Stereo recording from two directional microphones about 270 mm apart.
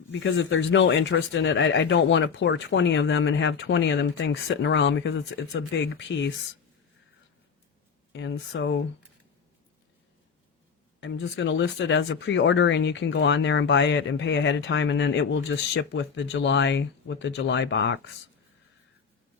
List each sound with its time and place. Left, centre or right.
0.1 s speech: left
8.1 s speech: left
11.0 s speech: left